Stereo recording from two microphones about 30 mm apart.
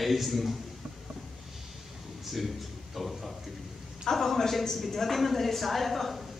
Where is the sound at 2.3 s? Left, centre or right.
Centre.